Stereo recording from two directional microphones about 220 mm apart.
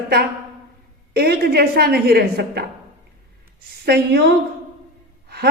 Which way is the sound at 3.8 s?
50° right (ahead or behind).